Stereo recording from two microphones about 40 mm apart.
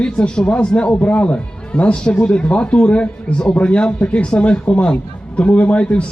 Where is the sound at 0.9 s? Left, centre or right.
Left.